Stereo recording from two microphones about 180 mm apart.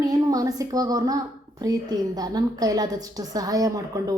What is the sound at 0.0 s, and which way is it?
Speech, 20° right (ahead or behind).